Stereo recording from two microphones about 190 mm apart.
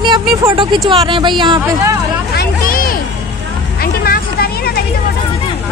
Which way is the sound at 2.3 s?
50° left (ahead or behind).